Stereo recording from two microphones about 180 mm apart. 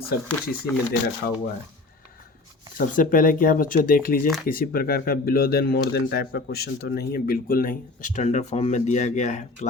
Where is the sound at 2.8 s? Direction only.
50° left (ahead or behind).